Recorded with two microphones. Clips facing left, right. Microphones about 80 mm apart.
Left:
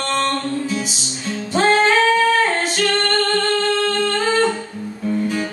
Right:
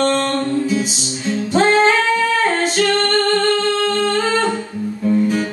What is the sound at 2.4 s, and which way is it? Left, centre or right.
A capella, right.